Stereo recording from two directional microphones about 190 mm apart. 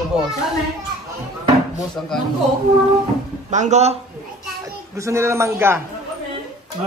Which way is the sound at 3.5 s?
40° right (ahead or behind).